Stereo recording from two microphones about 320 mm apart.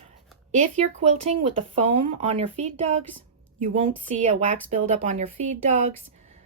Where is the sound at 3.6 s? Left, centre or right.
Right.